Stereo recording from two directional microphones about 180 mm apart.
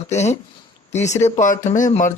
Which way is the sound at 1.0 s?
40° left (ahead or behind).